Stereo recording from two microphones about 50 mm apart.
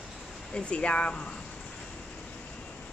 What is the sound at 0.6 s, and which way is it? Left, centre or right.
Speech, left.